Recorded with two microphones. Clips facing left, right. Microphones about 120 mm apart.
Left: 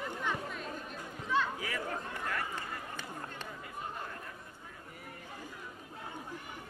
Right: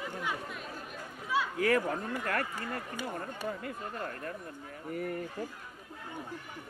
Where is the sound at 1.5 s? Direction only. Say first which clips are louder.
Right 9 dB; 60° right (ahead or behind).